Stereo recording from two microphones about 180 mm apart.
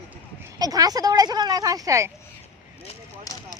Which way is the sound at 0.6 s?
20° right (ahead or behind).